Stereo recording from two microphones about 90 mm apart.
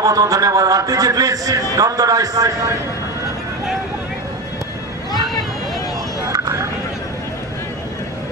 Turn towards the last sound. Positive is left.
turn(degrees=-40)  # may be behind; listen again after turning